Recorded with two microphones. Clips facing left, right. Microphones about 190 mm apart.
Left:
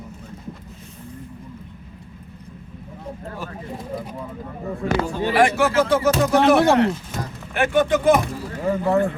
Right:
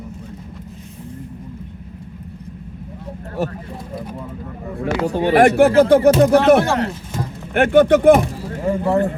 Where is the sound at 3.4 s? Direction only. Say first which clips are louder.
Right 15 dB; 75° right (ahead or behind).